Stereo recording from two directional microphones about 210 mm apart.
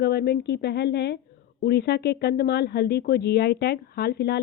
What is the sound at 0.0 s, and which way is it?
Speech, 50° left (ahead or behind).